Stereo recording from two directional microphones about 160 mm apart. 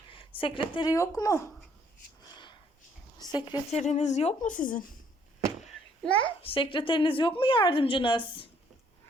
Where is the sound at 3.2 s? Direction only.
25° left (ahead or behind).